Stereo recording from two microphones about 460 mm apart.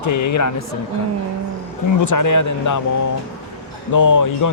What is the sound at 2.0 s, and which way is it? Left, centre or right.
Speech, left.